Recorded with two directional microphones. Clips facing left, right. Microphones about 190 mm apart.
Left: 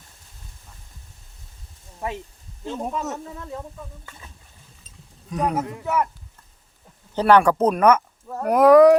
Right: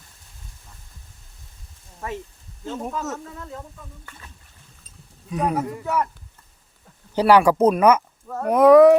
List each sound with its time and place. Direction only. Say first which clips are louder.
2.6 s speech: left 1 dB; 20° left (ahead or behind)
5.3 s a man's voice: right 1 dB; 5° right (ahead or behind)
7.2 s a man's voice: right 1 dB; 10° right (ahead or behind)